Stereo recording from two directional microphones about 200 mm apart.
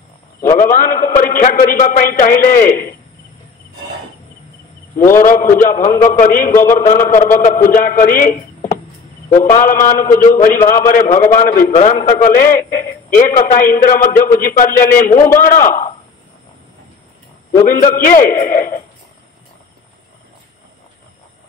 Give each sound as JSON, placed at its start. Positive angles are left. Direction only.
{"t": 0.6, "sound": "a man's voice", "side_deg": 45}
{"t": 5.2, "sound": "a man's voice", "side_deg": 40}
{"t": 17.6, "sound": "a man's voice", "side_deg": 45}